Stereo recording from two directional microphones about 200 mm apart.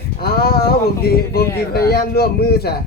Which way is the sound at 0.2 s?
50° left (ahead or behind).